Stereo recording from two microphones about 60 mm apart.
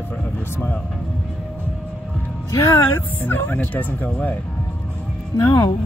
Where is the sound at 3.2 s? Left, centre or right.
Left.